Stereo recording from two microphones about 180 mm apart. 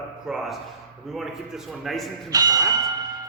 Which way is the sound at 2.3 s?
20° right (ahead or behind).